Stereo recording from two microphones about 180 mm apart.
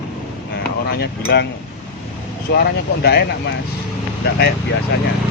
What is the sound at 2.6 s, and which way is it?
Speech, 65° left (ahead or behind).